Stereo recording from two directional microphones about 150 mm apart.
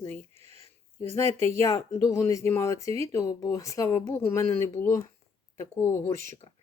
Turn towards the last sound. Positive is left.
turn(degrees=15)  # may be behind; listen again after turning